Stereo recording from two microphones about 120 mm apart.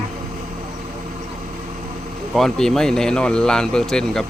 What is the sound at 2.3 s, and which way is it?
Speech, 5° left (ahead or behind).